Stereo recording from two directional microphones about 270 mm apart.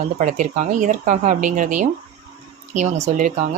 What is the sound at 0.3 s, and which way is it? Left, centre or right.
Speech, right.